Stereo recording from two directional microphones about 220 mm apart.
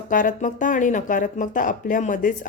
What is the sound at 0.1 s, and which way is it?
Speech, 35° left (ahead or behind).